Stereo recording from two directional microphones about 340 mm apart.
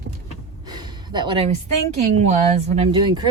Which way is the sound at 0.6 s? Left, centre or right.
Centre.